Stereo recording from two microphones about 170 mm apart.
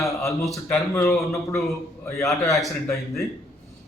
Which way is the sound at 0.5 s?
15° left (ahead or behind).